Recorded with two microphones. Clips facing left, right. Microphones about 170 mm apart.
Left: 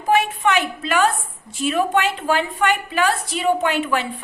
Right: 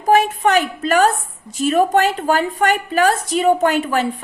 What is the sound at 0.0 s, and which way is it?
A woman's voice, 40° right (ahead or behind).